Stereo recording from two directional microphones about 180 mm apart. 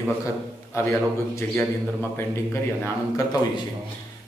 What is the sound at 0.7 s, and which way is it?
A man's voice, 15° left (ahead or behind).